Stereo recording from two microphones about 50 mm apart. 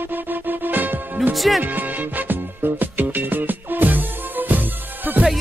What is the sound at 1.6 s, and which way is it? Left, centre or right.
Music, right.